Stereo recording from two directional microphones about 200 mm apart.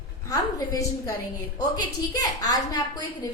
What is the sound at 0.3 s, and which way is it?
A woman's voice, 15° left (ahead or behind).